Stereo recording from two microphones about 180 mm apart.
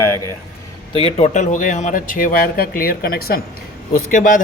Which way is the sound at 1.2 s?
40° left (ahead or behind).